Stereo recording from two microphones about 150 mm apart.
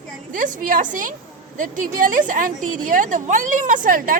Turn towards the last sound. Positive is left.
turn(degrees=-65)  # may be behind; listen again after turning